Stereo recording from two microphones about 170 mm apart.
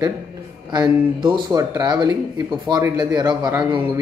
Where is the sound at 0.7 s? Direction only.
25° right (ahead or behind).